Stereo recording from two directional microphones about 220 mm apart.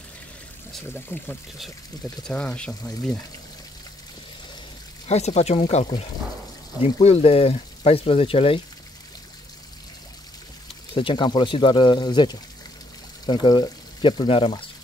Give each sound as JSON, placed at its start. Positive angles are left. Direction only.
{"t": 0.9, "sound": "speech", "side_deg": 10}
{"t": 5.0, "sound": "speech", "side_deg": 30}
{"t": 11.0, "sound": "speech", "side_deg": 20}